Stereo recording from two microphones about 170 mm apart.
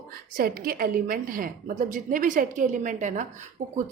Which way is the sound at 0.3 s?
60° right (ahead or behind).